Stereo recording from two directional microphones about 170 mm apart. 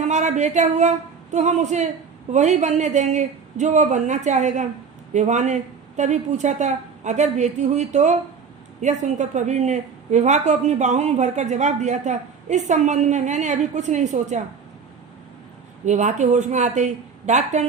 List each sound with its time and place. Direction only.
0.0 s a woman's voice: 45° right (ahead or behind)
15.9 s a woman's voice: 45° right (ahead or behind)